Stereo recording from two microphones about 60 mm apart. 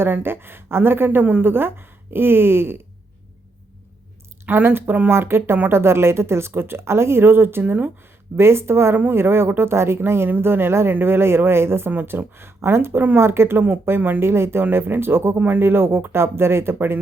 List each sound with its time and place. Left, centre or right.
0.0 s a woman's voice: right
4.4 s a woman's voice: right
8.4 s speech: right
10.2 s a woman's voice: right
14.2 s a woman's voice: right
15.4 s speech: right
15.6 s speech: right